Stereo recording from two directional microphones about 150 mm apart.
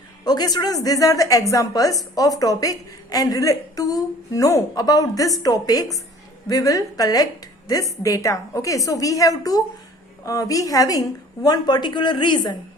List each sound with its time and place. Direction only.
0.3 s a woman's voice: 25° left (ahead or behind)